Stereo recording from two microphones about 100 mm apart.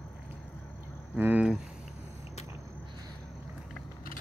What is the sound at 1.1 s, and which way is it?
Cricket, 20° right (ahead or behind).